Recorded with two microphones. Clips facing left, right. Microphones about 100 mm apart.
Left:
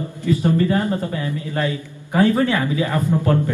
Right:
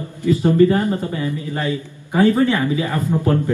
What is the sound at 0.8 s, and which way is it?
A man's voice, 15° right (ahead or behind).